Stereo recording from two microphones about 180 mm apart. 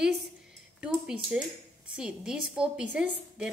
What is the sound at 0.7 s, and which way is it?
A woman's voice, 5° right (ahead or behind).